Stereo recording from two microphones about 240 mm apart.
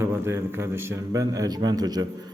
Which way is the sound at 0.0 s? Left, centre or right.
Centre.